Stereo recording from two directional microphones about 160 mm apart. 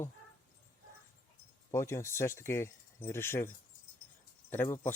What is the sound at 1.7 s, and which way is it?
Speech, 15° left (ahead or behind).